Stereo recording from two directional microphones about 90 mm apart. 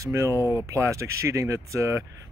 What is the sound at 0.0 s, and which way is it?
Speech, 30° right (ahead or behind).